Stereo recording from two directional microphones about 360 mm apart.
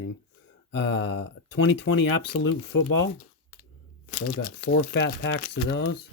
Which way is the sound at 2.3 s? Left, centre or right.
Left.